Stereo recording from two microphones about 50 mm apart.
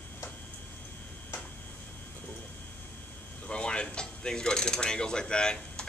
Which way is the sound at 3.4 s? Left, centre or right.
Centre.